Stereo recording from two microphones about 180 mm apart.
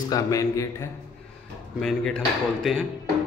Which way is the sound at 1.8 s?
5° left (ahead or behind).